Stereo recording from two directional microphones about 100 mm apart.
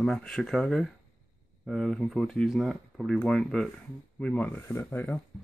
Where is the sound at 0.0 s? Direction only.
5° left (ahead or behind).